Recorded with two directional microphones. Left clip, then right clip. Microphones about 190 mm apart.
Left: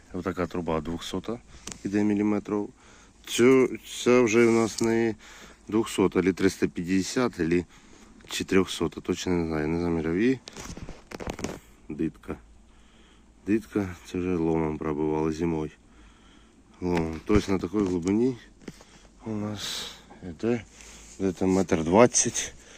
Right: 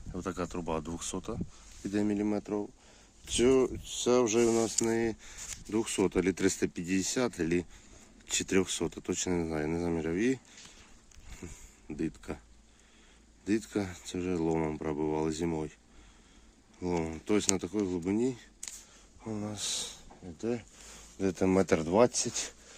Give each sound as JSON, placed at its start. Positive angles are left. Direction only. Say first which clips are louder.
{"t": 0.1, "sound": "speech", "louder": "left 6 dB", "side_deg": 0}
{"t": 11.9, "sound": "speech", "louder": "left 5 dB", "side_deg": -5}
{"t": 13.4, "sound": "speech", "louder": "left 5 dB", "side_deg": 0}
{"t": 16.8, "sound": "speech", "louder": "left 5 dB", "side_deg": 0}
{"t": 20.2, "sound": "speech", "louder": "left 7 dB", "side_deg": 5}
{"t": 21.3, "sound": "speech", "louder": "left 1 dB", "side_deg": -30}
{"t": 21.8, "sound": "speech", "louder": "left 6 dB", "side_deg": 5}